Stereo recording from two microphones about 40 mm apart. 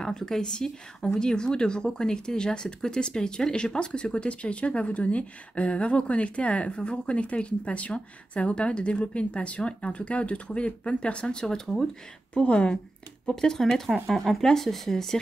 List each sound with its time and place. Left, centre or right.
0.0 s speech: centre
11.4 s speech: centre
12.4 s speech: left
13.3 s speech: centre